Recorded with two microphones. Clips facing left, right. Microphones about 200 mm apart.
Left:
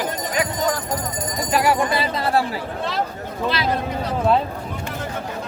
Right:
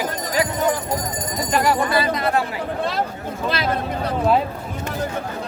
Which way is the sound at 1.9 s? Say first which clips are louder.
Right 1 dB; 25° left (ahead or behind).